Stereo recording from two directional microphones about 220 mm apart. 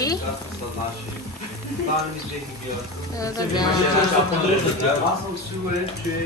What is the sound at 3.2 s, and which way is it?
Speech, 15° left (ahead or behind).